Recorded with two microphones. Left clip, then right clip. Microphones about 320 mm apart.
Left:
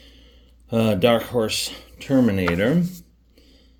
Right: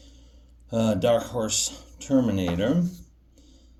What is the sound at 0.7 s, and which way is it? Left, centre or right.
Speech, left.